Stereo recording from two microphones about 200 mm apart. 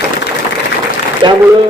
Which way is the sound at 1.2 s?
20° right (ahead or behind).